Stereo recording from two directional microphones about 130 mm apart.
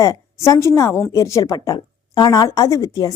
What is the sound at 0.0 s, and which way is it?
A woman's voice, 25° left (ahead or behind).